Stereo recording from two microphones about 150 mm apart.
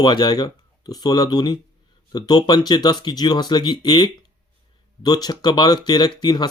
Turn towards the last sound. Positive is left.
turn(degrees=30)  # may be behind; listen again after turning